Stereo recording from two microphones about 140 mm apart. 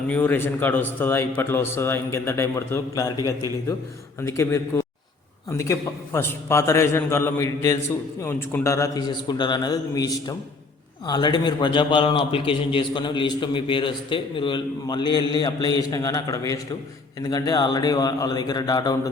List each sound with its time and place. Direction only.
0.1 s a man's voice: 15° left (ahead or behind)